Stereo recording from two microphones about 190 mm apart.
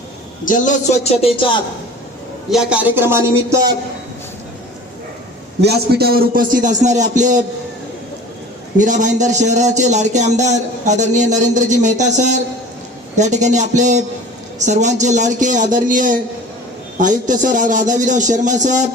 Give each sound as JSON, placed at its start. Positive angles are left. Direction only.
{"t": 0.4, "sound": "a man's voice", "side_deg": 45}
{"t": 2.5, "sound": "speech", "side_deg": -5}
{"t": 5.5, "sound": "a man's voice", "side_deg": -60}
{"t": 8.8, "sound": "speech", "side_deg": -40}